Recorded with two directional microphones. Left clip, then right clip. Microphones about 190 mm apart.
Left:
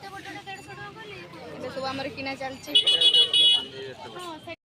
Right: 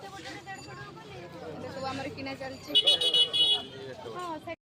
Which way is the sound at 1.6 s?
30° left (ahead or behind).